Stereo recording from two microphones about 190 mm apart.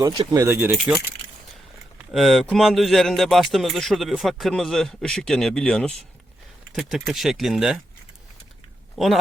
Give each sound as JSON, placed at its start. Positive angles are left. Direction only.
{"t": 0.2, "sound": "speech", "side_deg": -20}
{"t": 0.4, "sound": "speech", "side_deg": -10}
{"t": 2.1, "sound": "speech", "side_deg": 0}
{"t": 9.0, "sound": "speech", "side_deg": 0}